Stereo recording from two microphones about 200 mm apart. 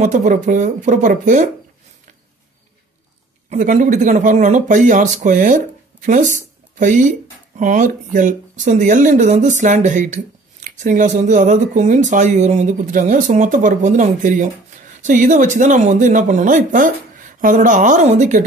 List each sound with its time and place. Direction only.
0.0 s speech: 40° right (ahead or behind)
3.4 s speech: 40° right (ahead or behind)